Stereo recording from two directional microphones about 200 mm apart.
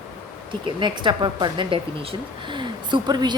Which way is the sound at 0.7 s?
25° right (ahead or behind).